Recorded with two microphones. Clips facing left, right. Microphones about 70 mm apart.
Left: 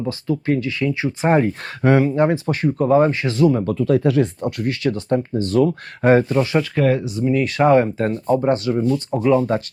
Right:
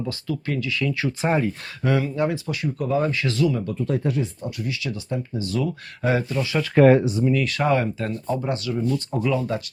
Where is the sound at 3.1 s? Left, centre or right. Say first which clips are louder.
Left 5 dB; left.